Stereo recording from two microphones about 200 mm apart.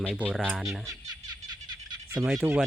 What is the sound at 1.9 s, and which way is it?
Frog, 15° right (ahead or behind).